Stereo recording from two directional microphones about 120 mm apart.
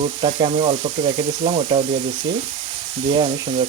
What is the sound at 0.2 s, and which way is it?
Frying, 55° right (ahead or behind).